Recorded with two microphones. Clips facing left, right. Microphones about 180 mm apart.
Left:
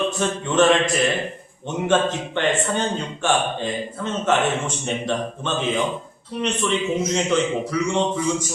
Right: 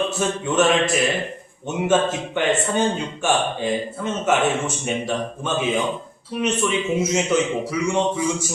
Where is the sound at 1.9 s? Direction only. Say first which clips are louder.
Even; 10° right (ahead or behind).